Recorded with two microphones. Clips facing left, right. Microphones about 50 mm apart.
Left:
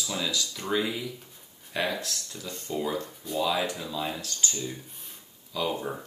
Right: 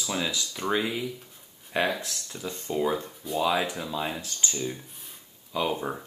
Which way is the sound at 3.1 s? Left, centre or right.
Centre.